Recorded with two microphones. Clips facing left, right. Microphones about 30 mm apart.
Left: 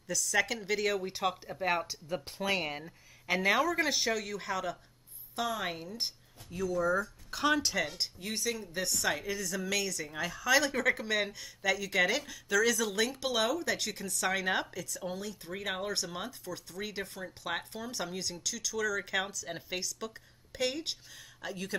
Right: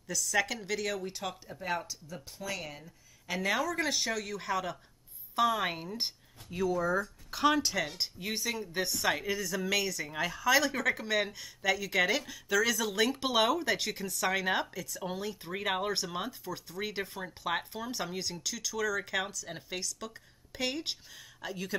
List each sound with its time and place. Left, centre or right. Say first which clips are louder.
0.1 s speech: even; centre; by 2.0 s left
2.0 s speech: left 6 dB; left
3.3 s speech: left 3 dB; centre